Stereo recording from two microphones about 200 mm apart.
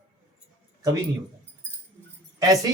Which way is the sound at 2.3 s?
15° right (ahead or behind).